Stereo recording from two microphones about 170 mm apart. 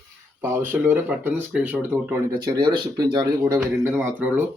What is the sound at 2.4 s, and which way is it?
Speech, 25° right (ahead or behind).